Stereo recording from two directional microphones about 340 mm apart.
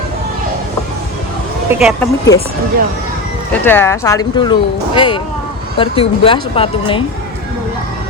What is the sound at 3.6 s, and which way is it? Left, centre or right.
Speech, centre.